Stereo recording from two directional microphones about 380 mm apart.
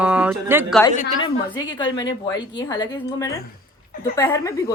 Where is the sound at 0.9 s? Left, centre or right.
Centre.